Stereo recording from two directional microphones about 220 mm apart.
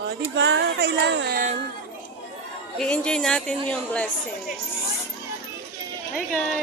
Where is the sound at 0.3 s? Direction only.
55° right (ahead or behind).